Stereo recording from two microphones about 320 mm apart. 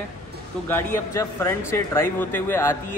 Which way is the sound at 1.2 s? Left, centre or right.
Centre.